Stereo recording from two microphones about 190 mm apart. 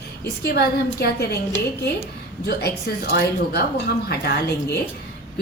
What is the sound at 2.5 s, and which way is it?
A woman's voice, 60° left (ahead or behind).